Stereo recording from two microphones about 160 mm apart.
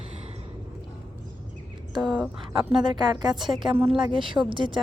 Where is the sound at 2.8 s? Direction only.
30° right (ahead or behind).